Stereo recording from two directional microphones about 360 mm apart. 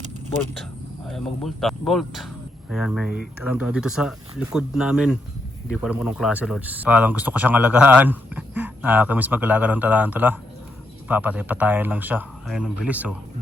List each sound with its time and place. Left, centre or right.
0.5 s speech: centre